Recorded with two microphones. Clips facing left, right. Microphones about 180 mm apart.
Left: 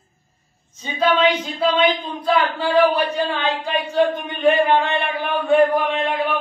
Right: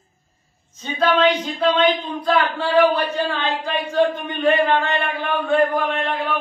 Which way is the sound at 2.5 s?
10° left (ahead or behind).